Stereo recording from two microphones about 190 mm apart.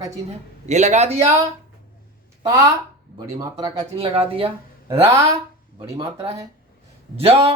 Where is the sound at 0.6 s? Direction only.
35° right (ahead or behind).